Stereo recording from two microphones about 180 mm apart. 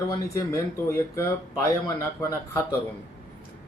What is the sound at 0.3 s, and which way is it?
Speech, 15° left (ahead or behind).